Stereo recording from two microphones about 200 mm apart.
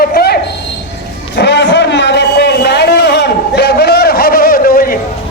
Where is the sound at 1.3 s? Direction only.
60° left (ahead or behind).